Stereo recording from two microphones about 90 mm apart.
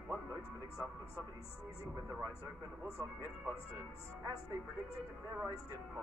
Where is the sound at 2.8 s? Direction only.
30° right (ahead or behind).